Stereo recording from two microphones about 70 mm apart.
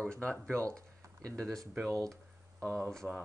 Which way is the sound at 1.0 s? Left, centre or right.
Right.